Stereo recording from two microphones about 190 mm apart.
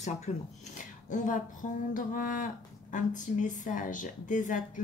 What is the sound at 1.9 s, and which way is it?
A woman's voice, 45° left (ahead or behind).